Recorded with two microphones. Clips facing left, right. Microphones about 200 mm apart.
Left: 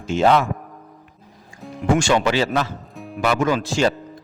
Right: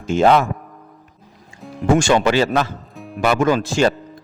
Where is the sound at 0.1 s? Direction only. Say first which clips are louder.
Right 2 dB; 50° right (ahead or behind).